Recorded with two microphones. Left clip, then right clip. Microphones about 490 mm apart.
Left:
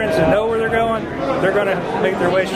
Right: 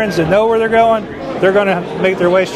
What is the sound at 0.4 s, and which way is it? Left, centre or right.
A man's voice, right.